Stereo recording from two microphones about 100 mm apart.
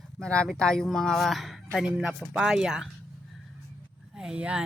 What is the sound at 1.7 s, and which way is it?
Speech, 10° right (ahead or behind).